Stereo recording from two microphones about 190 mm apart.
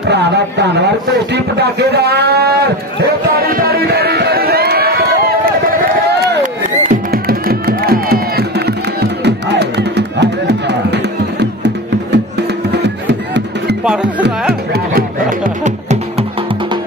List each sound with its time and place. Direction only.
0.1 s a man's voice: 65° right (ahead or behind)
3.4 s a sound: 55° right (ahead or behind)
6.4 s music: 50° right (ahead or behind)
14.7 s music: 50° right (ahead or behind)